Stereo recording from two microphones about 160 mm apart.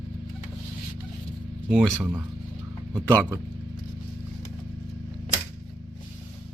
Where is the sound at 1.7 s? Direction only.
5° right (ahead or behind).